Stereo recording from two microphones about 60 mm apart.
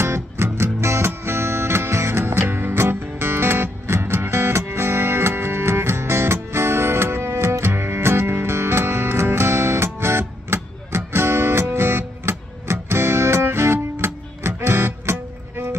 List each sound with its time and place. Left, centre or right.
0.0 s music: right